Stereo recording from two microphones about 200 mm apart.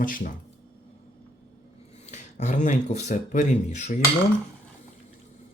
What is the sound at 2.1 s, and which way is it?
Speech, 35° left (ahead or behind).